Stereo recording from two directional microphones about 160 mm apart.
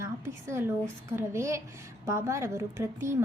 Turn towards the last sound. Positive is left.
turn(degrees=-15)  # may be behind; listen again after turning